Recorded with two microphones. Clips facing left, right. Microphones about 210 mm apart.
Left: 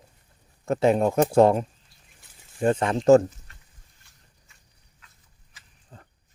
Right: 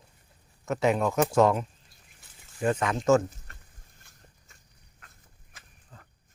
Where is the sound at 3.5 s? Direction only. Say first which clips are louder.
Right 4 dB; 50° right (ahead or behind).